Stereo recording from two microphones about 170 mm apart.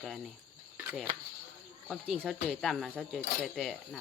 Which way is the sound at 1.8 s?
Centre (ahead or behind).